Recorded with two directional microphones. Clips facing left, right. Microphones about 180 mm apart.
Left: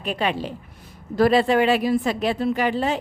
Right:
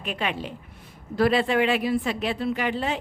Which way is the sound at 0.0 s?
35° left (ahead or behind).